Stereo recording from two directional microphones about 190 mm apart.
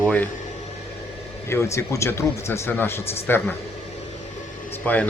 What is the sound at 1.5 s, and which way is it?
Speech, 15° left (ahead or behind).